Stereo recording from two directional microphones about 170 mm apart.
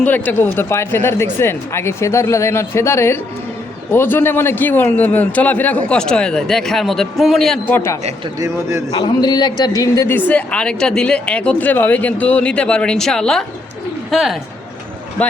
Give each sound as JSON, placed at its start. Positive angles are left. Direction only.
{"t": 0.0, "sound": "a man's voice", "side_deg": 10}
{"t": 8.4, "sound": "a man's voice", "side_deg": -15}
{"t": 8.9, "sound": "a man's voice", "side_deg": 25}